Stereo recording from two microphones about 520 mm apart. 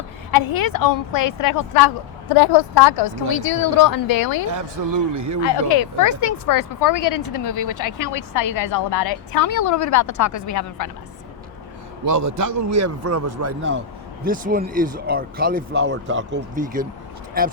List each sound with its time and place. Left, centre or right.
0.5 s speech: left
4.5 s a man's voice: right
5.6 s speech: left
12.0 s a man's voice: right; by 16.8 s centre